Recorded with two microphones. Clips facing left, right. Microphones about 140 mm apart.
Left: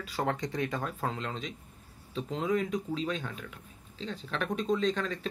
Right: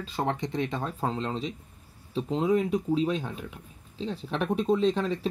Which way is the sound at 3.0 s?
5° right (ahead or behind).